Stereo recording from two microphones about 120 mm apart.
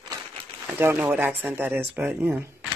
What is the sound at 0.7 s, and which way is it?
Speech, 20° right (ahead or behind).